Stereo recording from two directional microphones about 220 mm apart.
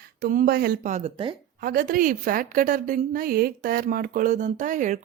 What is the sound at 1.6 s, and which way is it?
A woman's voice, 40° right (ahead or behind).